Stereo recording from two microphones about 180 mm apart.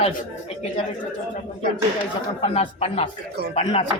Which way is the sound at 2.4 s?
35° left (ahead or behind).